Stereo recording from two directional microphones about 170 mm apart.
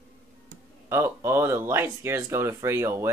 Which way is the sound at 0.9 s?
15° right (ahead or behind).